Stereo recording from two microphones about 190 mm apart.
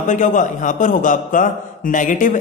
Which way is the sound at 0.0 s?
40° left (ahead or behind).